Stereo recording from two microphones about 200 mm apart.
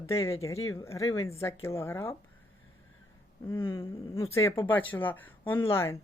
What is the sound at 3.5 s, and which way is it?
A man's voice, 15° left (ahead or behind).